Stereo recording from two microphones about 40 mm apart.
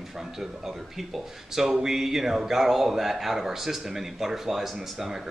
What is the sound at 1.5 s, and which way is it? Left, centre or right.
Speech, centre.